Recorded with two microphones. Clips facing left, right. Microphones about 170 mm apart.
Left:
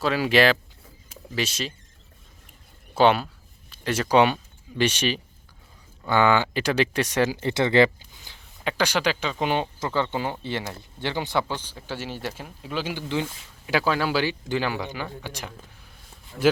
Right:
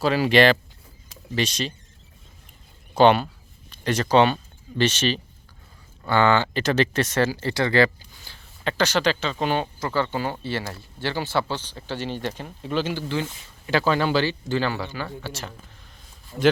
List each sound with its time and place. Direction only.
0.0 s speech: centre (ahead or behind)
2.9 s speech: 5° left (ahead or behind)
16.3 s speech: 25° right (ahead or behind)